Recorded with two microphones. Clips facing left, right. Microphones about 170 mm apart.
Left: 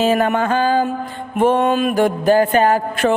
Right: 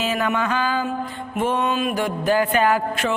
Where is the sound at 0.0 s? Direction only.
50° left (ahead or behind).